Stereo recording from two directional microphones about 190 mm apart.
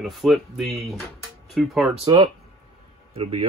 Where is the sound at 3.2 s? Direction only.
30° right (ahead or behind).